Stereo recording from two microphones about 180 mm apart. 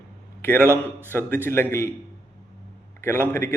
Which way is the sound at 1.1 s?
10° left (ahead or behind).